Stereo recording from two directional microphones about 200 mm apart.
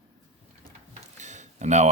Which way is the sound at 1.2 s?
35° right (ahead or behind).